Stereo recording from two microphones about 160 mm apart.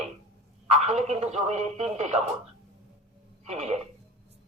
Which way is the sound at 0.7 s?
45° right (ahead or behind).